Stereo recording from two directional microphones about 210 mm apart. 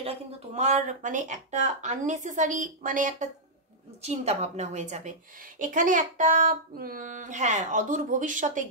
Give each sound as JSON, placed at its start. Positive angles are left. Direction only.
{"t": 0.0, "sound": "speech", "side_deg": -30}